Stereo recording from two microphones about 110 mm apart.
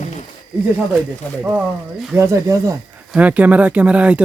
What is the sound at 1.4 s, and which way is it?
Speech, 10° right (ahead or behind).